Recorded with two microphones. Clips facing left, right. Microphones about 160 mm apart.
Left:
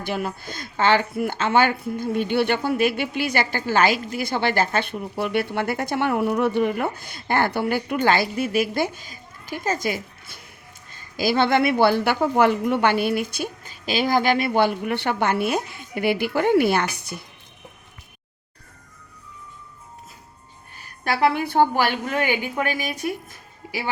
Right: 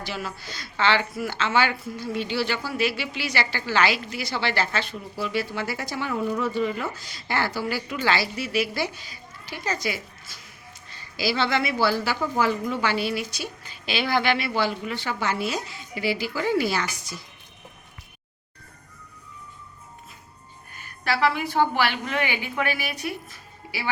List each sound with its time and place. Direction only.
0.0 s a woman's voice: 55° left (ahead or behind)
21.0 s speech: 50° left (ahead or behind)